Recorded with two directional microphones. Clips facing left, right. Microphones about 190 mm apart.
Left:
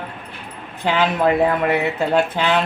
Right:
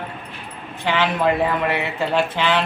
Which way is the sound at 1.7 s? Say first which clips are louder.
Left 4 dB; 45° left (ahead or behind).